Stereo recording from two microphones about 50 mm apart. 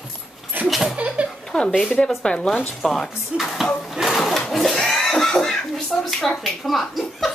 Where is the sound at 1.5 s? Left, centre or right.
Centre.